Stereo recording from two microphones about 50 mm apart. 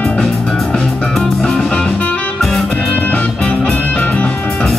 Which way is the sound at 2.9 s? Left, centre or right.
Left.